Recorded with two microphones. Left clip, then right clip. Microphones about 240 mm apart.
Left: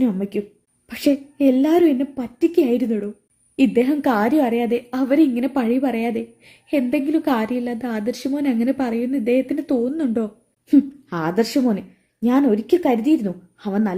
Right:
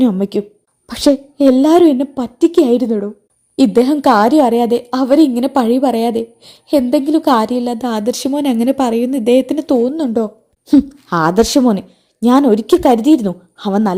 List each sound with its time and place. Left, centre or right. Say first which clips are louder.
0.0 s a woman's voice: right 7 dB; right
9.9 s a woman's voice: right 6 dB; centre
11.1 s a woman's voice: right 9 dB; right